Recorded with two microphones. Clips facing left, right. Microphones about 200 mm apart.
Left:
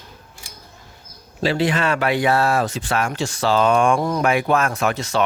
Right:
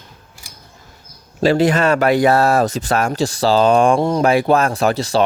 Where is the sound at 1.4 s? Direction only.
45° right (ahead or behind).